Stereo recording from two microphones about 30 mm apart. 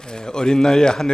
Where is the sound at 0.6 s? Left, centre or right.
Centre.